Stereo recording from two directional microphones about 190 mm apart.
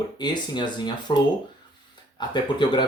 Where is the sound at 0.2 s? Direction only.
25° left (ahead or behind).